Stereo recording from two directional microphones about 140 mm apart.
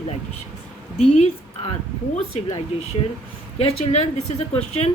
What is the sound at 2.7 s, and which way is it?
Speech, 45° left (ahead or behind).